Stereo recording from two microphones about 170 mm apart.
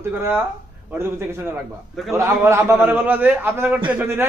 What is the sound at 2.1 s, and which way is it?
A man's voice, 15° right (ahead or behind).